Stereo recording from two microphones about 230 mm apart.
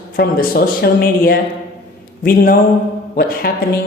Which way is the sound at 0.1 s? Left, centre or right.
Left.